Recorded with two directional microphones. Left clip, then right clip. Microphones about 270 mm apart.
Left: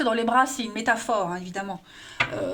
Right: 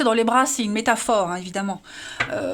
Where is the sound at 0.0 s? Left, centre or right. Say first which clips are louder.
Right 3 dB; right.